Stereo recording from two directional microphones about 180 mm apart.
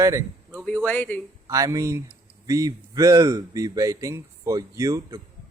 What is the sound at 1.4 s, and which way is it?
Speech, 20° right (ahead or behind).